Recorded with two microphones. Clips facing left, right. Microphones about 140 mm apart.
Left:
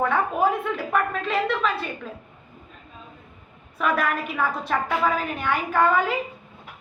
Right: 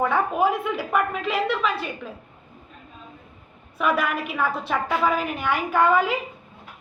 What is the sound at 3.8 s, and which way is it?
A woman's voice, 5° right (ahead or behind).